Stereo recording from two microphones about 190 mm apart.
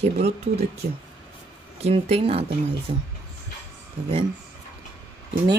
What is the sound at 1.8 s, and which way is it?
Speech, 35° right (ahead or behind).